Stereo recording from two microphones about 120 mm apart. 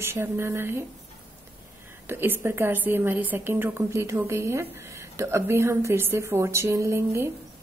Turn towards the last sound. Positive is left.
turn(degrees=-20)  # may be behind; listen again after turning